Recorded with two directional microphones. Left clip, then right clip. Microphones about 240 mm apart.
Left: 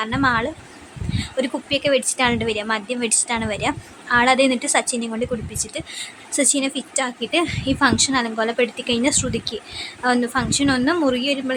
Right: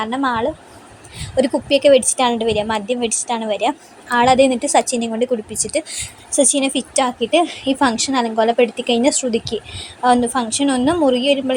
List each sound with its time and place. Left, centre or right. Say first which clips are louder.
0.0 s a woman's voice: right 1 dB; centre
6.3 s a woman's voice: right 5 dB; centre